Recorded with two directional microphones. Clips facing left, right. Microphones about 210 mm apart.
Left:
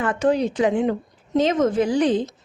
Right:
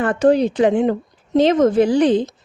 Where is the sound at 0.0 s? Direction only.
35° right (ahead or behind).